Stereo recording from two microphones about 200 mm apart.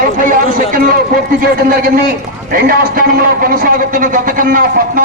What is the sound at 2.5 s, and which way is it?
A man's voice, 45° right (ahead or behind).